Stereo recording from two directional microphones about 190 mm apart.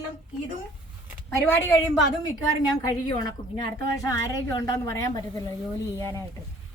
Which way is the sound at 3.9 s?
20° left (ahead or behind).